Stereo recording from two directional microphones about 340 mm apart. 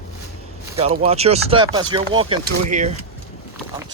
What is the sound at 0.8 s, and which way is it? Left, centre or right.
Speech, centre.